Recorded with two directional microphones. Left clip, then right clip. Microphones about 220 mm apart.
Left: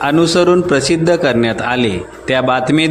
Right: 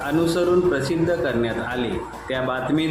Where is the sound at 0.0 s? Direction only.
40° left (ahead or behind).